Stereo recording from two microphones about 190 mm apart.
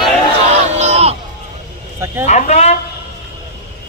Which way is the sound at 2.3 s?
35° left (ahead or behind).